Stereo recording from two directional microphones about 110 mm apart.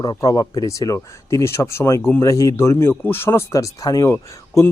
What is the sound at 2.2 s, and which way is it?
Speech, 30° left (ahead or behind).